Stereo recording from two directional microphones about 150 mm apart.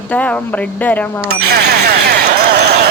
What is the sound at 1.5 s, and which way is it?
Basketball bounce, 90° right.